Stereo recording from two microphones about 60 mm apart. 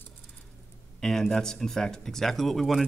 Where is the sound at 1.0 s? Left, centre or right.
Centre.